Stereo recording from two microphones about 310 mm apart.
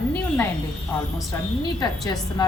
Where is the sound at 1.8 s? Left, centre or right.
Centre.